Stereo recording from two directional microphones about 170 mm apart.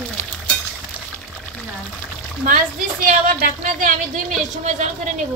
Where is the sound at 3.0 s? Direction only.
50° right (ahead or behind).